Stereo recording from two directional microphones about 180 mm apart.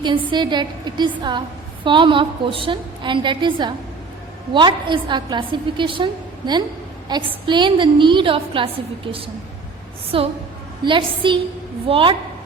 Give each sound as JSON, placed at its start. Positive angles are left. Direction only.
{"t": 0.0, "sound": "a woman's voice", "side_deg": -25}
{"t": 10.1, "sound": "a woman's voice", "side_deg": -30}